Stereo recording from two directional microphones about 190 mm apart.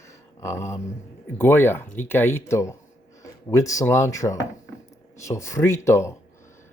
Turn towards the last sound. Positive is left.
turn(degrees=15)  # may be behind; listen again after turning